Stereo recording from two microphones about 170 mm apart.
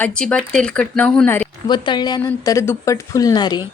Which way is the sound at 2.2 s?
15° left (ahead or behind).